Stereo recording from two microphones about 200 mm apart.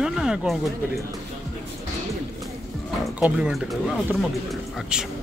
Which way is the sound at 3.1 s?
5° right (ahead or behind).